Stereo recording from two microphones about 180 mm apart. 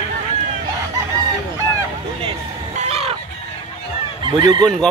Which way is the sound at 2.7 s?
35° right (ahead or behind).